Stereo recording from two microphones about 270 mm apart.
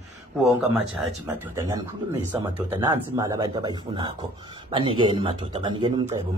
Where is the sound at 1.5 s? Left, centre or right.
Centre.